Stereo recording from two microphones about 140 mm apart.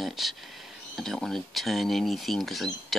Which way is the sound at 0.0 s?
Centre (ahead or behind).